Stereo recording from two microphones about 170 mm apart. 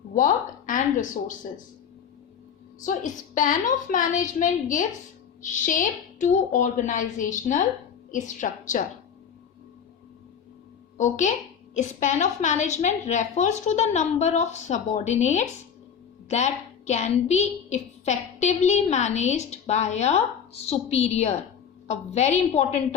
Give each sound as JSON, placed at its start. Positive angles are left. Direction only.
{"t": 0.1, "sound": "speech", "side_deg": 50}
{"t": 2.8, "sound": "a woman's voice", "side_deg": 50}
{"t": 10.9, "sound": "a woman's voice", "side_deg": 45}